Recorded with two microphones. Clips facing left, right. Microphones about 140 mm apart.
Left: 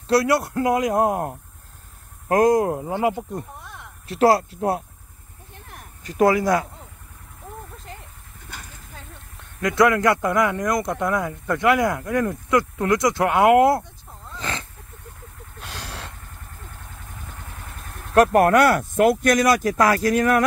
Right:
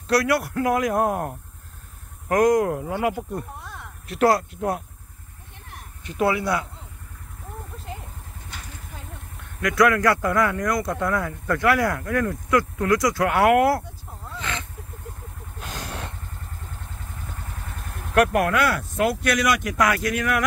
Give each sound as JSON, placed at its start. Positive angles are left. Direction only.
{"t": 0.1, "sound": "speech", "side_deg": 25}
{"t": 4.1, "sound": "speech", "side_deg": 30}
{"t": 6.0, "sound": "speech", "side_deg": 40}
{"t": 9.6, "sound": "speech", "side_deg": 25}
{"t": 14.4, "sound": "roaring cats", "side_deg": 35}
{"t": 15.6, "sound": "a sound", "side_deg": -5}
{"t": 18.1, "sound": "speech", "side_deg": 35}